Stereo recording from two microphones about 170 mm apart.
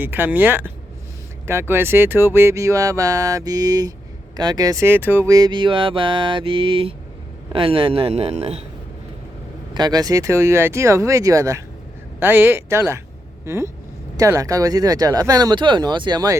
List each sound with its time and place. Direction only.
0.0 s a man's voice: 10° right (ahead or behind); by 8.5 s 40° right (ahead or behind)
9.7 s speech: 25° right (ahead or behind)
13.4 s vehicle: 15° right (ahead or behind)
14.2 s speech: 20° right (ahead or behind)